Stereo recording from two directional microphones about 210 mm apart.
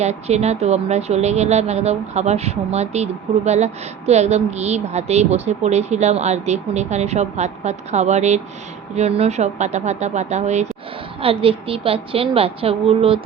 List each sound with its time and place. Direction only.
0.0 s a woman's voice: 30° right (ahead or behind)